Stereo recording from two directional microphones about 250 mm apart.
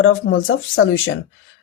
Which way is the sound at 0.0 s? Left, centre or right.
Left.